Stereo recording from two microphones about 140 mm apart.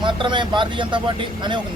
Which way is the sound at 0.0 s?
35° right (ahead or behind).